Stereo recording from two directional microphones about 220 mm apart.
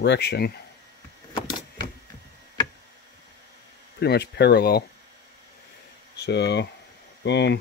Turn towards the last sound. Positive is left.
turn(degrees=50)  # may be behind; listen again after turning